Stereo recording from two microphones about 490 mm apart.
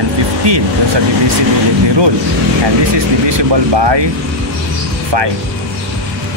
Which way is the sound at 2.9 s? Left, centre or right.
Right.